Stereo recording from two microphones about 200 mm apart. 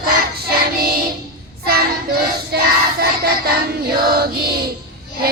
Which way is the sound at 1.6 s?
50° right (ahead or behind).